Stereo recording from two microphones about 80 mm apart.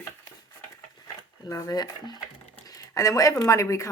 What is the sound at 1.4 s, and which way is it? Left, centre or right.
Speech, left.